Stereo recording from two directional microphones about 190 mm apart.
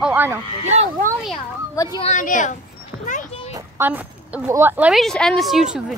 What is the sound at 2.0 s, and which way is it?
Speech, 40° left (ahead or behind).